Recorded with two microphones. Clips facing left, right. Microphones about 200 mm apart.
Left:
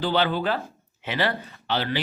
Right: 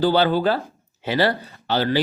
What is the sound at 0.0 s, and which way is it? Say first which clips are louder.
Speech: right 6 dB; 40° right (ahead or behind).